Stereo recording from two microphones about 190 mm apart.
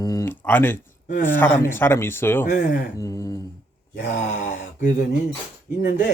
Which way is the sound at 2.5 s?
60° left (ahead or behind).